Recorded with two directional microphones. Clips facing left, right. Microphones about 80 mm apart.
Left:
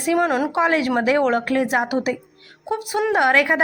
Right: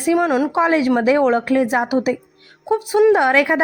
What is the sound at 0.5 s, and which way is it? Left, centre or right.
A woman's voice, right.